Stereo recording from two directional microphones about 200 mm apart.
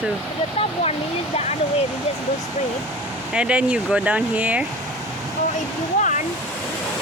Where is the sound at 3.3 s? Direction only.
5° right (ahead or behind).